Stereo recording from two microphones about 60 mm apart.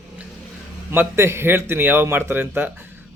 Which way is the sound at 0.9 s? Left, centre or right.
Right.